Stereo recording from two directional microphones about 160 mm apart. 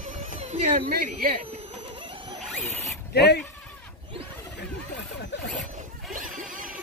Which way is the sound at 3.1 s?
90° left.